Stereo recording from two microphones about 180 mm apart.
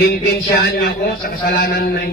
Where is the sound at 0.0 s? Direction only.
60° left (ahead or behind).